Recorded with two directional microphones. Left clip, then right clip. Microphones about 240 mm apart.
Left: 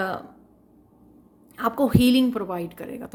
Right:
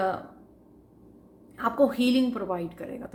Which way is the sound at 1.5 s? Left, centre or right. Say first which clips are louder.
Left 2 dB; left.